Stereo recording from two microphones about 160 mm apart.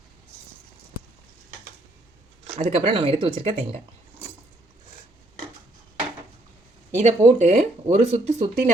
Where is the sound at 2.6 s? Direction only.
40° right (ahead or behind).